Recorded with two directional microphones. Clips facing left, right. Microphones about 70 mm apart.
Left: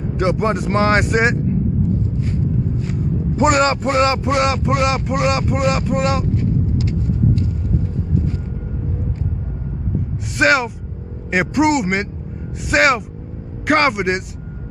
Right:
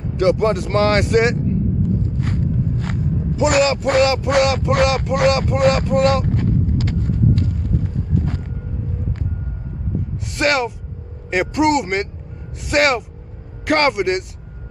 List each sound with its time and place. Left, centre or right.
0.2 s speech: left
2.1 s a sound: right
3.3 s a man's voice: left
4.0 s a man's voice: left
6.2 s vehicle: right
10.3 s a man's voice: centre